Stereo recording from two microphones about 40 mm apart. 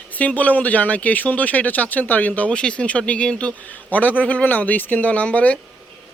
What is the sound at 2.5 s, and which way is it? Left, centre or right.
Speech, left.